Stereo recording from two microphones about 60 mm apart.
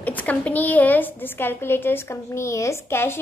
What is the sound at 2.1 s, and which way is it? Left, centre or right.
A woman's voice, left.